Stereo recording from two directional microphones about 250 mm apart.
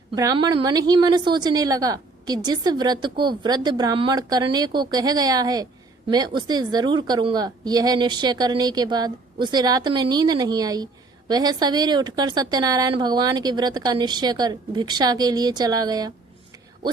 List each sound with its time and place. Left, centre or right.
0.2 s a woman's voice: centre